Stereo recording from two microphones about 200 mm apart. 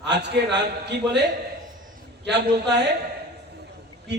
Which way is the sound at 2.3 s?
60° right (ahead or behind).